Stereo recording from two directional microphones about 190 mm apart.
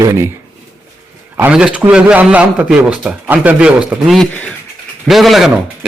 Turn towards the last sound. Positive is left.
turn(degrees=0)  # may be behind; listen again after turning